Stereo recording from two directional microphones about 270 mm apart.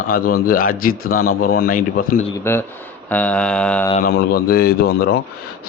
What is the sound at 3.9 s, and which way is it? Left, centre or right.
A man's voice, left.